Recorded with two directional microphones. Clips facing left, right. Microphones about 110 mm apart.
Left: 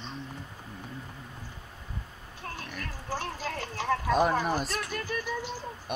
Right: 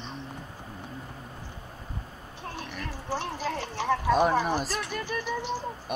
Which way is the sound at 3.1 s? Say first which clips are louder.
Right 3 dB; 20° right (ahead or behind).